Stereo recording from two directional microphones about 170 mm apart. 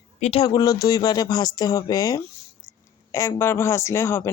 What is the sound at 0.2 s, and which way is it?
Speech, 35° left (ahead or behind).